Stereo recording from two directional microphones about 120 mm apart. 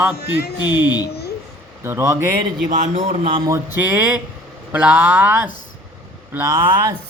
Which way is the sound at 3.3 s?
35° right (ahead or behind).